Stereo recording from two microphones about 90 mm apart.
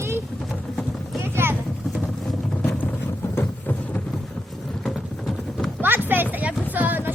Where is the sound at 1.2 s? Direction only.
25° right (ahead or behind).